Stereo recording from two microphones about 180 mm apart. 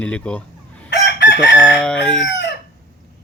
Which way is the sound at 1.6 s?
5° left (ahead or behind).